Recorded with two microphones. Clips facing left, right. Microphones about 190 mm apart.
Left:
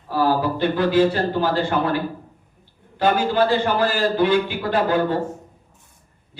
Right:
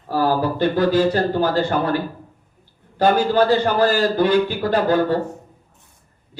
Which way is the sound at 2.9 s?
40° right (ahead or behind).